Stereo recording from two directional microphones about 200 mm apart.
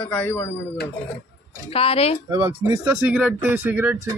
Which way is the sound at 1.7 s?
30° left (ahead or behind).